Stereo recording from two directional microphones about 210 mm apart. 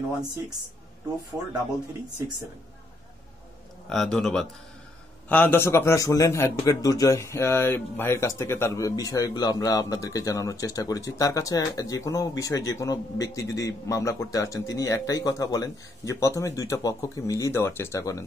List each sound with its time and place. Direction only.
1.3 s a man's voice: 5° right (ahead or behind)
3.9 s a man's voice: centre (ahead or behind)